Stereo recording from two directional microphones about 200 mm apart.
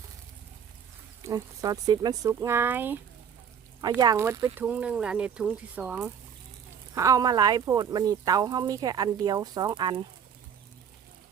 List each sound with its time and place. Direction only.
1.2 s speech: 15° right (ahead or behind)